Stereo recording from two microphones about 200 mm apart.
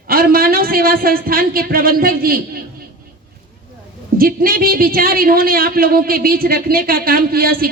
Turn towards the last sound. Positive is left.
turn(degrees=-50)  # may be behind; listen again after turning